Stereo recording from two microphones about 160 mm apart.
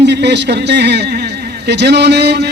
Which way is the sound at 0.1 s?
90° right.